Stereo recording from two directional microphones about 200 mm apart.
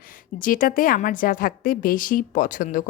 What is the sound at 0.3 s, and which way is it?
A woman's voice, 45° left (ahead or behind).